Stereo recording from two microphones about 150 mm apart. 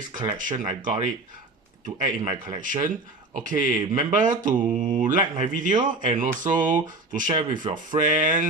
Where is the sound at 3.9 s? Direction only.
60° right (ahead or behind).